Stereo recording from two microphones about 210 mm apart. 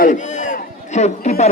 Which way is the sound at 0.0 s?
35° left (ahead or behind).